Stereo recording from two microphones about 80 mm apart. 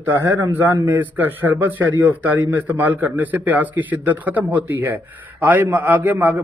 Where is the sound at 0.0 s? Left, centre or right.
Right.